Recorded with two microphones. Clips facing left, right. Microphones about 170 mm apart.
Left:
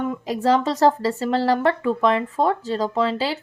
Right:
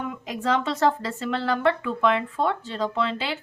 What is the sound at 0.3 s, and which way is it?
Speech, 35° left (ahead or behind).